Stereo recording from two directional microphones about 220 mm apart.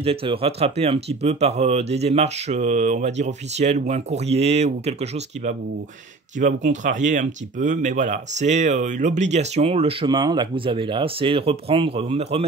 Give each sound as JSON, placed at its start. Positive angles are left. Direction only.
{"t": 0.0, "sound": "speech", "side_deg": -25}
{"t": 6.4, "sound": "speech", "side_deg": -35}